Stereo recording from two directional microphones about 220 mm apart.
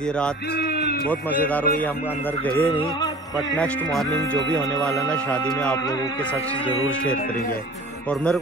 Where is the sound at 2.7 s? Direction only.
20° left (ahead or behind).